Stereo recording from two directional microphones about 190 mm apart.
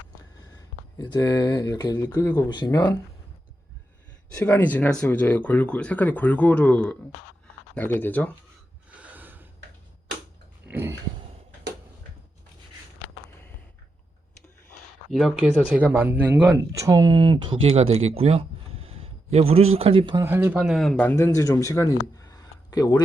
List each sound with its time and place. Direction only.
0.9 s speech: 20° left (ahead or behind)
4.4 s speech: 10° left (ahead or behind)
9.0 s a sound: 10° right (ahead or behind)
10.7 s dog: 10° right (ahead or behind)
15.1 s speech: centre (ahead or behind); by 17.8 s 30° right (ahead or behind)
17.9 s a sound: 30° right (ahead or behind)
19.7 s speech: 30° right (ahead or behind)
20.2 s speech: 10° right (ahead or behind); by 23.0 s 20° left (ahead or behind)